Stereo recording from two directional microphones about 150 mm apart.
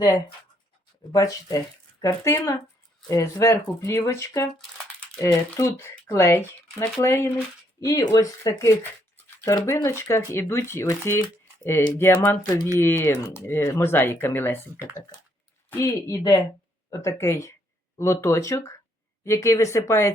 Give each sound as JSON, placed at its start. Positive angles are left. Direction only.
{"t": 1.1, "sound": "speech", "side_deg": 25}
{"t": 4.5, "sound": "crumpling", "side_deg": 5}
{"t": 5.7, "sound": "speech", "side_deg": 15}